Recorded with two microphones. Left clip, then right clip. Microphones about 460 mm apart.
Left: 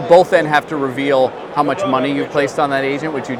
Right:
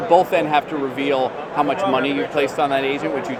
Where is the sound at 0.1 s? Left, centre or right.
Left.